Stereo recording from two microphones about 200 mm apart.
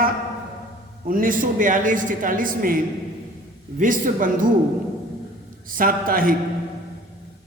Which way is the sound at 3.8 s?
40° right (ahead or behind).